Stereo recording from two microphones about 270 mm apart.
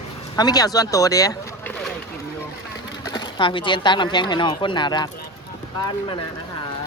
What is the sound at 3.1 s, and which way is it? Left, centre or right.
Speech, centre.